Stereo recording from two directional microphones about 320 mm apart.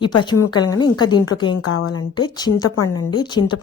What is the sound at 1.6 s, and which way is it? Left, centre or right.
Speech, left.